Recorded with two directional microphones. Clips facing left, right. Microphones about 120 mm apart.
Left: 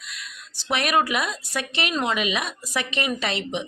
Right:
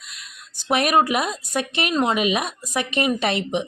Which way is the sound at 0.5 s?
45° right (ahead or behind).